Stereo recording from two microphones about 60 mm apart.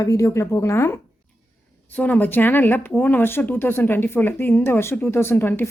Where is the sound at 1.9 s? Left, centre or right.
Left.